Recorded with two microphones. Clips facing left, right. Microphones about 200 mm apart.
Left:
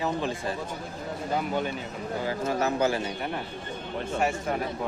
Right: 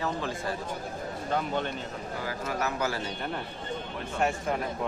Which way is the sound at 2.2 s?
25° left (ahead or behind).